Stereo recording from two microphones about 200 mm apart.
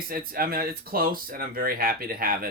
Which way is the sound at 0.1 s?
45° right (ahead or behind).